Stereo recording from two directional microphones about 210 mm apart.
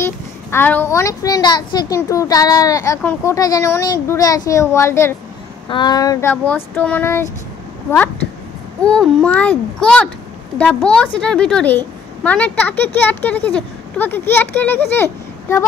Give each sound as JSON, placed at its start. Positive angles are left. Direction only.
{"t": 0.0, "sound": "a woman's voice", "side_deg": 10}
{"t": 8.8, "sound": "a child's voice", "side_deg": 5}